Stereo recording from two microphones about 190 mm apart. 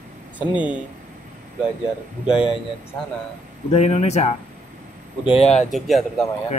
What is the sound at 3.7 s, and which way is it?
Speech, 35° left (ahead or behind).